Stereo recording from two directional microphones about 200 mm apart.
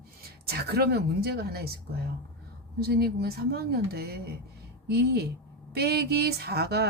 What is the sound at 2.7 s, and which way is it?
Speech, 50° right (ahead or behind).